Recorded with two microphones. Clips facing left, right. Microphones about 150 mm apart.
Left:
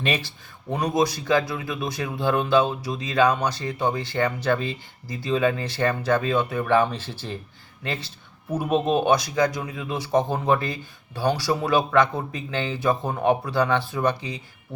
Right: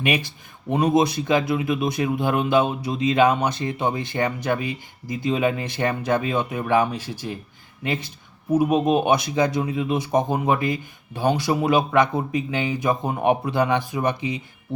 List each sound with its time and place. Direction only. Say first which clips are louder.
0.0 s speech: right 3 dB; 15° right (ahead or behind)